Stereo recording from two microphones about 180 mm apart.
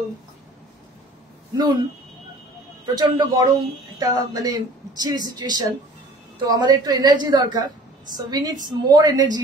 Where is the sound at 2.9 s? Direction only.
20° right (ahead or behind).